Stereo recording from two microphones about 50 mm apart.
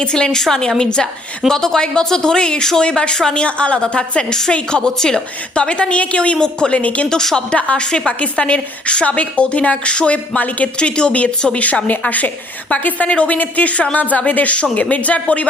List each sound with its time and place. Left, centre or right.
0.0 s a woman's voice: centre
7.1 s a woman's voice: centre; by 10.7 s left
10.8 s a woman's voice: centre